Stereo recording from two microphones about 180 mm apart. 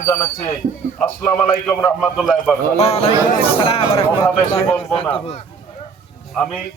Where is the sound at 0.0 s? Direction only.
15° left (ahead or behind).